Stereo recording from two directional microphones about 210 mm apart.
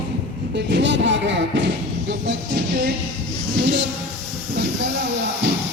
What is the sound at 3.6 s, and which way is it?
Speech, 55° right (ahead or behind).